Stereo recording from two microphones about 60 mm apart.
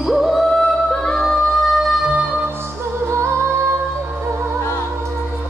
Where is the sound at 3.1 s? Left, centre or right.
Right.